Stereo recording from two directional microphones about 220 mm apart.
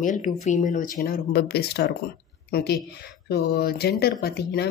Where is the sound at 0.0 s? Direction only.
35° left (ahead or behind).